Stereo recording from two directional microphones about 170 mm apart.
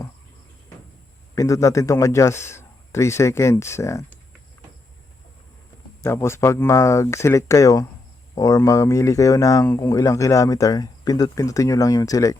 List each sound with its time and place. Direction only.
1.4 s a man's voice: 20° left (ahead or behind)
6.0 s a man's voice: 15° left (ahead or behind)